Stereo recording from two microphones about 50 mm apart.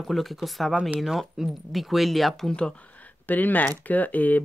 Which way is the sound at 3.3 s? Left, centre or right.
Left.